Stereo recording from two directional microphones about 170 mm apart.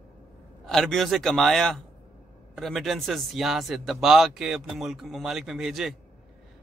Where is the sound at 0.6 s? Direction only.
Centre (ahead or behind).